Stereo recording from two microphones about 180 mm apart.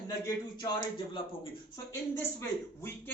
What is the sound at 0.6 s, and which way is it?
A man's voice, 25° left (ahead or behind).